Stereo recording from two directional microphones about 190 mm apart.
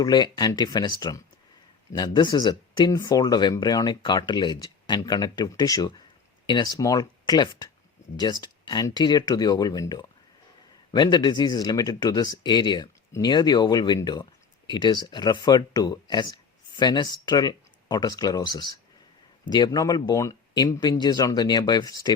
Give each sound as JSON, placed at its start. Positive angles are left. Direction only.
{"t": 0.0, "sound": "speech", "side_deg": 20}